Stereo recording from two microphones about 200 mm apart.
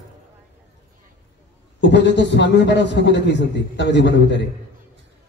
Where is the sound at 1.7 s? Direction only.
60° left (ahead or behind).